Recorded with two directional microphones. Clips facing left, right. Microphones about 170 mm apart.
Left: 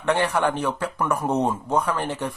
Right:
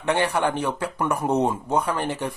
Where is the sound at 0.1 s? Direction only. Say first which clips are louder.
Left 1 dB; 15° right (ahead or behind).